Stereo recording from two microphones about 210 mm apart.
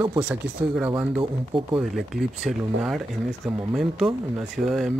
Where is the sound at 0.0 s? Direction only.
10° right (ahead or behind).